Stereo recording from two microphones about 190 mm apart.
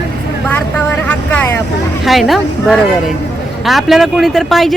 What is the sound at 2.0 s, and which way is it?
Speech, centre (ahead or behind).